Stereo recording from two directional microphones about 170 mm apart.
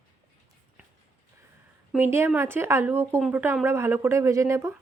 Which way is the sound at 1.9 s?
15° right (ahead or behind).